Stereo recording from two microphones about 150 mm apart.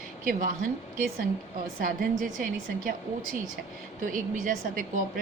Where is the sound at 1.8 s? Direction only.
70° right (ahead or behind).